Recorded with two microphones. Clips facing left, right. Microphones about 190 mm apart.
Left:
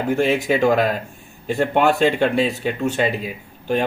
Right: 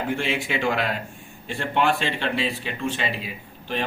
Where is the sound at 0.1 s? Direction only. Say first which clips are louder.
Left 11 dB; 40° left (ahead or behind).